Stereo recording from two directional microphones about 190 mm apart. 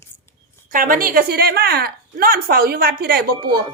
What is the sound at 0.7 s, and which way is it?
A woman's voice, 45° right (ahead or behind).